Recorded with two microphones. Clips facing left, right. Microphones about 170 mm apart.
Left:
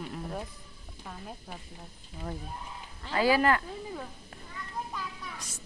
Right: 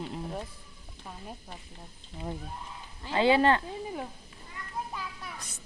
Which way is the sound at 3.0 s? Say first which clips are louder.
Right 2 dB; 25° right (ahead or behind).